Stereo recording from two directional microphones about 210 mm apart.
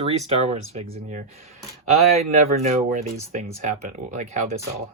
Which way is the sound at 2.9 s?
35° right (ahead or behind).